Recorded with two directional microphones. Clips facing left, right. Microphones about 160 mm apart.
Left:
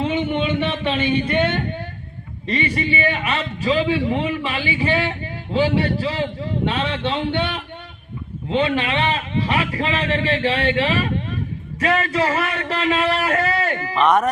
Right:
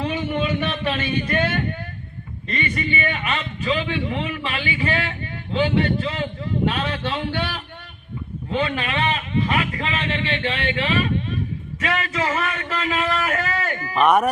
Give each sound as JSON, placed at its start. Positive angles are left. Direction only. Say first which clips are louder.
{"t": 0.0, "sound": "a sound", "louder": "left 3 dB", "side_deg": 25}
{"t": 2.5, "sound": "a man's voice", "louder": "left 4 dB", "side_deg": 30}
{"t": 13.9, "sound": "speech", "louder": "even", "side_deg": -10}